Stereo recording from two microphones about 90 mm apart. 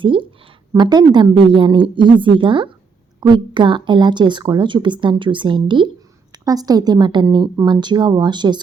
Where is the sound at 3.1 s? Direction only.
55° right (ahead or behind).